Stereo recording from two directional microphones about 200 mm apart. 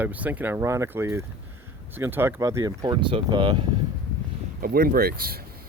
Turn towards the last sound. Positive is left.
turn(degrees=-50)  # may be behind; listen again after turning